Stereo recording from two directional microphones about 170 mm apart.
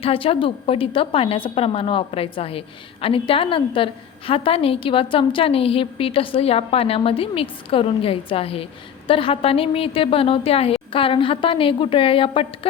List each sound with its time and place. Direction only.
0.0 s a woman's voice: 35° left (ahead or behind)